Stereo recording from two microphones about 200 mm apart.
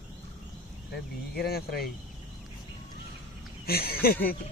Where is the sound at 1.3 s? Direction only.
50° left (ahead or behind).